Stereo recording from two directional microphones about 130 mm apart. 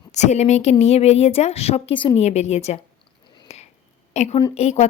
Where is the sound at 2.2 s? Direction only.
60° left (ahead or behind).